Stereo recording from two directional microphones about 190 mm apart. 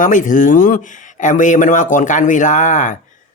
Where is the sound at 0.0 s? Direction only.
45° left (ahead or behind).